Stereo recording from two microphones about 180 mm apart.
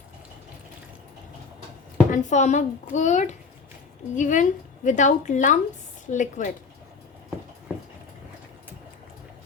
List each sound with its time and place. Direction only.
2.0 s a child's voice: 45° left (ahead or behind)